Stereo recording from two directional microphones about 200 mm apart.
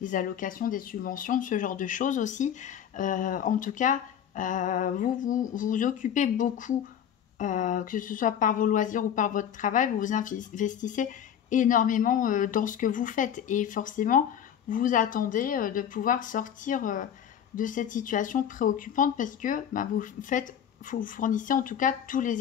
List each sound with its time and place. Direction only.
0.0 s speech: 40° left (ahead or behind)